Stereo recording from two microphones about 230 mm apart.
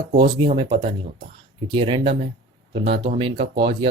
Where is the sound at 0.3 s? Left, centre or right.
Right.